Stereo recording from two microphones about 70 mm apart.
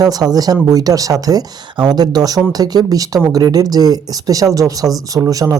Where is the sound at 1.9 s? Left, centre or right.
Right.